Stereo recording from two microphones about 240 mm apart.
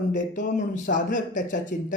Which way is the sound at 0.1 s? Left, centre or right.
Left.